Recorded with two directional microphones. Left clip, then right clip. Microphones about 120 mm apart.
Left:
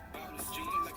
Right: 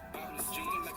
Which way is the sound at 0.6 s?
40° right (ahead or behind).